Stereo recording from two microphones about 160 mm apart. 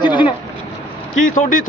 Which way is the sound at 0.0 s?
30° left (ahead or behind).